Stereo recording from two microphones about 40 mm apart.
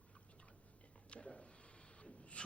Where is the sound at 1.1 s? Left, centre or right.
Left.